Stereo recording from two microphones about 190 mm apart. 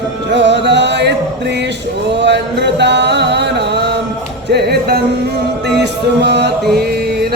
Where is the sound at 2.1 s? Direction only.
65° right (ahead or behind).